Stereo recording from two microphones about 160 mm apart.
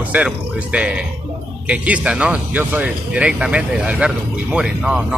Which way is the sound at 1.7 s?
10° right (ahead or behind).